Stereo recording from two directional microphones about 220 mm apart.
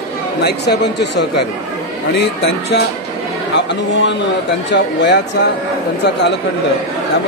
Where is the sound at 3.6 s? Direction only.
55° left (ahead or behind).